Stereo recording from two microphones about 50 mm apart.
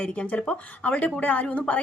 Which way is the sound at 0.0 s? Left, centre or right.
Left.